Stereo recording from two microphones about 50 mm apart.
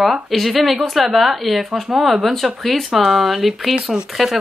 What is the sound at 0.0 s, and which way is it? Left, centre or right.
Speech, centre.